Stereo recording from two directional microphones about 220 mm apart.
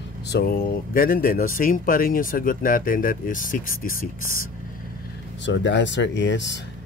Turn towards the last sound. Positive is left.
turn(degrees=55)  # may be behind; listen again after turning